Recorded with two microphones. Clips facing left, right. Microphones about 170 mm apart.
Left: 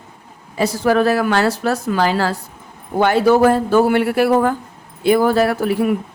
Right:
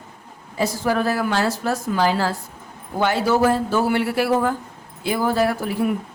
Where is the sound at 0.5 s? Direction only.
70° left (ahead or behind).